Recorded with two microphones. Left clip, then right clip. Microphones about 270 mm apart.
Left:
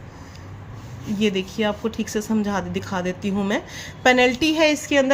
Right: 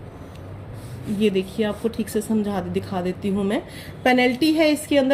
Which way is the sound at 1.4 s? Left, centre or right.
Left.